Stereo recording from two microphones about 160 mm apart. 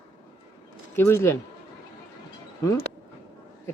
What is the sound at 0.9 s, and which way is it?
Speech, 15° left (ahead or behind).